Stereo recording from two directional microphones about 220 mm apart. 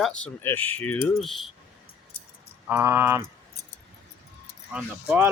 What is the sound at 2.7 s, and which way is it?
Speech, 10° right (ahead or behind).